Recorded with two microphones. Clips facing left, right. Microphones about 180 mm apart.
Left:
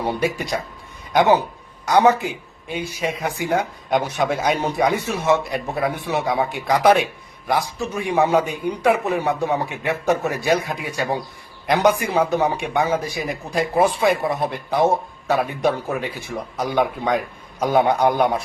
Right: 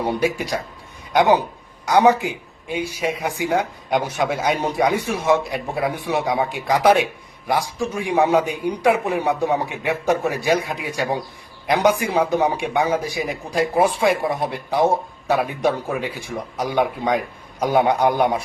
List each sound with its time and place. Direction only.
0.2 s speech: 10° right (ahead or behind)
1.9 s speech: 10° right (ahead or behind)